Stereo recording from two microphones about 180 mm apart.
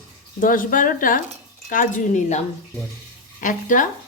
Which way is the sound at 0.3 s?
50° left (ahead or behind).